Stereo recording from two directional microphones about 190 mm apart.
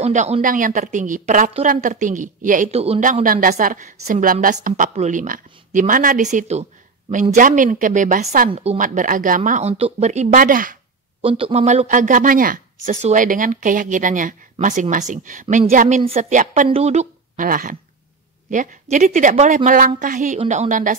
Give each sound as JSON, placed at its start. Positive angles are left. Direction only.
{"t": 0.0, "sound": "speech", "side_deg": -35}
{"t": 8.5, "sound": "speech", "side_deg": -35}
{"t": 11.1, "sound": "a woman's voice", "side_deg": -30}